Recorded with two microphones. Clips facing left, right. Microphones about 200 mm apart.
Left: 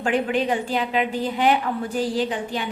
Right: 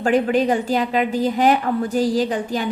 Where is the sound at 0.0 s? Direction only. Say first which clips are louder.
Right 5 dB; 40° right (ahead or behind).